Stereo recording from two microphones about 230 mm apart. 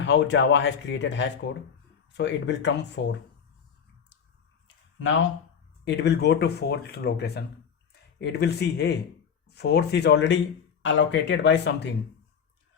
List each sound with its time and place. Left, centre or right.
0.0 s speech: left
5.8 s speech: left